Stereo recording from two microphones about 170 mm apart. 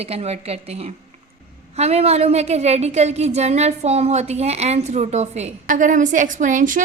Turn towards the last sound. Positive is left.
turn(degrees=-50)  # may be behind; listen again after turning